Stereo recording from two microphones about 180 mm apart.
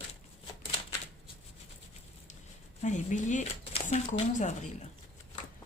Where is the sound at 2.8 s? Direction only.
45° left (ahead or behind).